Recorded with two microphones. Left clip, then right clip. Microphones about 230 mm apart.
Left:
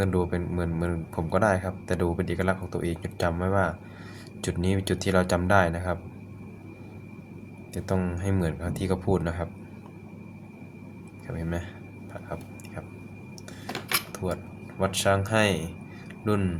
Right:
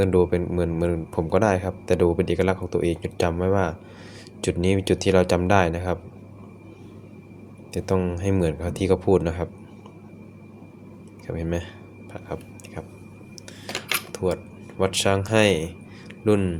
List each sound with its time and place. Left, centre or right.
0.0 s speech: centre
7.7 s speech: centre
11.3 s speech: centre
13.7 s a sound: centre
14.8 s speech: right